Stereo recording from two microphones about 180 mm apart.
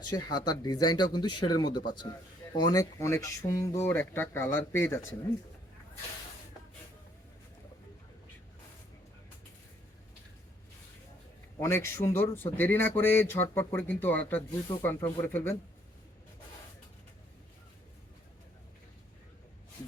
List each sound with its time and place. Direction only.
0.0 s speech: 20° left (ahead or behind)
11.6 s speech: 15° left (ahead or behind)